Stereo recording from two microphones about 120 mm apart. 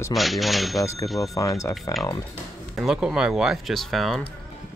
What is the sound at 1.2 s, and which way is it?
Speech, 25° left (ahead or behind).